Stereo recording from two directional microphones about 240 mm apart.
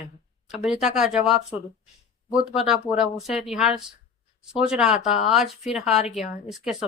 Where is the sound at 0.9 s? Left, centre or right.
Centre.